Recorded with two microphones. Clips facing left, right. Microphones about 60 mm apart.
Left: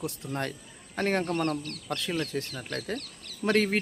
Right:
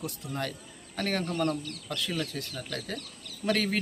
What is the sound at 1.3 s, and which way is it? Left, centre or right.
Speech, left.